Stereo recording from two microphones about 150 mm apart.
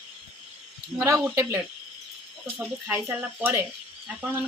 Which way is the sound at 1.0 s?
15° right (ahead or behind).